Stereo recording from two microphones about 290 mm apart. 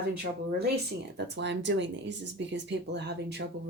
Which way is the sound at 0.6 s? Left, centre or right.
Right.